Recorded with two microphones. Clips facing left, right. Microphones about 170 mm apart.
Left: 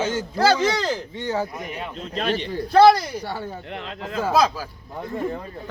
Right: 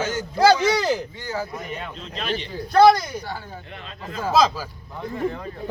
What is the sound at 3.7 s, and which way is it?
Speech, 65° left (ahead or behind).